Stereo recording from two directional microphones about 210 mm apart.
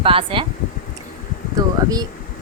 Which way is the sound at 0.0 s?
25° right (ahead or behind).